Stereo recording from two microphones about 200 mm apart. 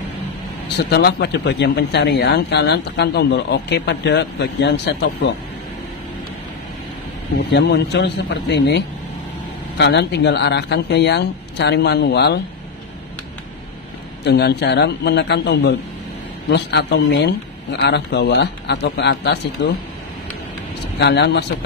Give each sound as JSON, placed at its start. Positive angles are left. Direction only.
{"t": 0.7, "sound": "speech", "side_deg": 55}
{"t": 7.5, "sound": "speech", "side_deg": 55}
{"t": 14.2, "sound": "speech", "side_deg": 55}
{"t": 21.0, "sound": "speech", "side_deg": 60}